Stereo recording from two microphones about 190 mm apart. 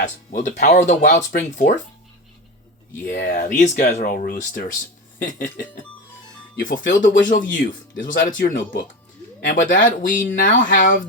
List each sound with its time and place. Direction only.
0.0 s speech: 40° left (ahead or behind)
3.1 s speech: 40° left (ahead or behind)